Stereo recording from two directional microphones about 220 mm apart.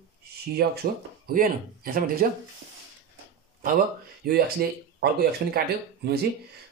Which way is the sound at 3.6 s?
40° right (ahead or behind).